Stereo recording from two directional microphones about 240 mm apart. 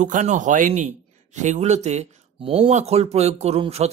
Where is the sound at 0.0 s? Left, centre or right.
Right.